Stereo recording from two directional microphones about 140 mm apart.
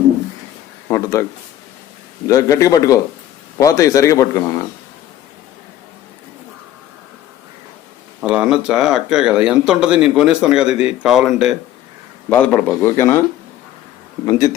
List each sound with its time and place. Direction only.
0.9 s speech: 20° left (ahead or behind)
2.2 s speech: 25° left (ahead or behind)
8.2 s speech: 5° right (ahead or behind)
12.3 s speech: 10° left (ahead or behind)
14.3 s speech: 25° left (ahead or behind)